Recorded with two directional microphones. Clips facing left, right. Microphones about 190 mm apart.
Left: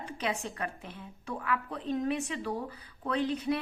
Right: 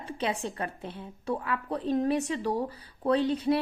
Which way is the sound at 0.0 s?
30° right (ahead or behind).